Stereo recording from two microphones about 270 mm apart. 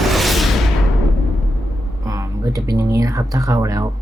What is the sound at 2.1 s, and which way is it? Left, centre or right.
Speech, centre.